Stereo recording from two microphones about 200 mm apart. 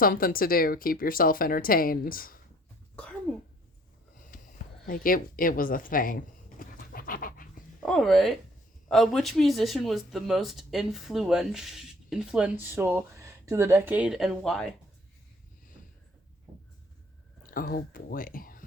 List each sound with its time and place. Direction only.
0.0 s speech: 45° left (ahead or behind)
3.3 s throat clearing: 5° left (ahead or behind)
4.2 s a sound: 45° left (ahead or behind)
7.8 s speech: centre (ahead or behind)
17.5 s speech: 45° left (ahead or behind)